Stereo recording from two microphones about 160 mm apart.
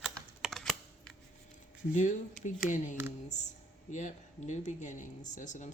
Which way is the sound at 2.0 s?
50° left (ahead or behind).